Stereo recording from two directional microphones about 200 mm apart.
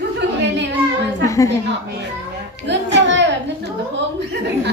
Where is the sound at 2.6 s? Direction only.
65° right (ahead or behind).